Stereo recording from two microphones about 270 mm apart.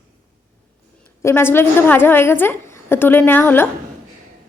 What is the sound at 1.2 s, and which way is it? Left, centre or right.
A woman's voice, centre.